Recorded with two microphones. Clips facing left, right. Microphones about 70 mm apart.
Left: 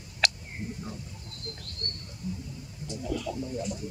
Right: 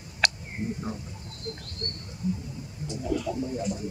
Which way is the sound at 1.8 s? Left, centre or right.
Centre.